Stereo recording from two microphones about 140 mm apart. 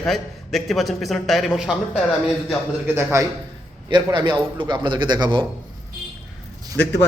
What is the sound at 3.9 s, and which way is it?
A man's voice, 35° right (ahead or behind).